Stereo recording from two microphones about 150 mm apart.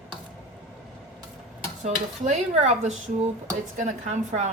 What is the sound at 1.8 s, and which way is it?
A woman's voice, 50° right (ahead or behind).